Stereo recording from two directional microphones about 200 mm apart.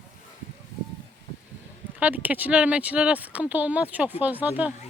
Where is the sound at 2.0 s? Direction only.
10° right (ahead or behind).